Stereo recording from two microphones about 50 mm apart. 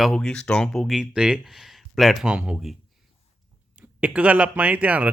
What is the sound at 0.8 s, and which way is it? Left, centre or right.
Speech, centre.